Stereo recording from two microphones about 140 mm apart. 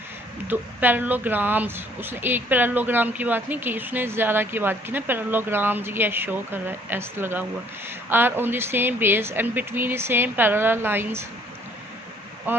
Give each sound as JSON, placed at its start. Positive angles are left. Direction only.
{"t": 0.4, "sound": "speech", "side_deg": -15}
{"t": 12.5, "sound": "speech", "side_deg": -15}